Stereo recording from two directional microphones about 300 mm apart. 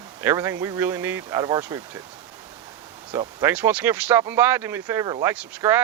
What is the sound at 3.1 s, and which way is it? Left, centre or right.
Speech, centre.